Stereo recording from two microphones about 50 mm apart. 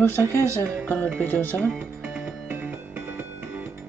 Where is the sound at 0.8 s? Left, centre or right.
Left.